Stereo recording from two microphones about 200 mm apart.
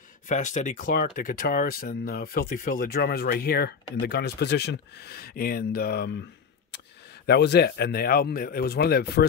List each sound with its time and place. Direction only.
0.3 s speech: 40° left (ahead or behind)
7.2 s speech: 55° left (ahead or behind)